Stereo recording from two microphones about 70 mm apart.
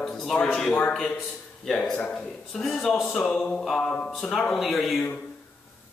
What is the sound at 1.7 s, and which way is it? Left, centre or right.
Music, centre.